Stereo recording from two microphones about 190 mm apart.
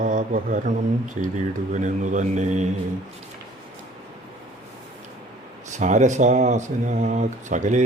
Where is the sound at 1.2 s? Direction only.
40° right (ahead or behind).